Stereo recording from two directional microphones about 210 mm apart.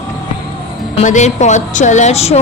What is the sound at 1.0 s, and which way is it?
A woman's voice, 35° left (ahead or behind).